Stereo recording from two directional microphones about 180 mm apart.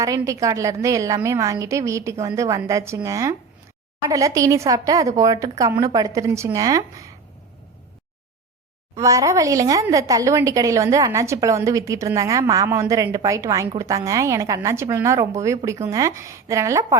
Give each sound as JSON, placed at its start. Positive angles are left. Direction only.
{"t": 0.2, "sound": "a woman's voice", "side_deg": -15}
{"t": 9.0, "sound": "a woman's voice", "side_deg": -15}